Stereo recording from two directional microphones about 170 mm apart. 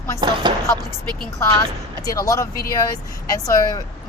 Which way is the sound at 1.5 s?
20° left (ahead or behind).